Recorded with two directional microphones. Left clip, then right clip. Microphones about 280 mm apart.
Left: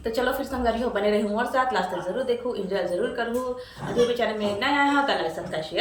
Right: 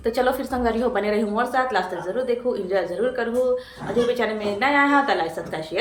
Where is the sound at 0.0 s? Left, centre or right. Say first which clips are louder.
Right 4 dB; centre.